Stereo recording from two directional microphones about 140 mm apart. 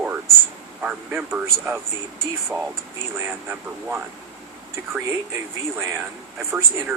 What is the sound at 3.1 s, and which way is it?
Speech, 15° right (ahead or behind).